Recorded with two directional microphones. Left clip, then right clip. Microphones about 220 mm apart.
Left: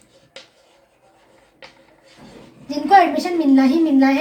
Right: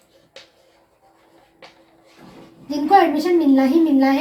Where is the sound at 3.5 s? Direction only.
20° left (ahead or behind).